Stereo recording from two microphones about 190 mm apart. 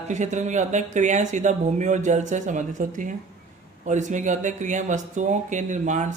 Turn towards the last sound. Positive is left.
turn(degrees=-40)  # may be behind; listen again after turning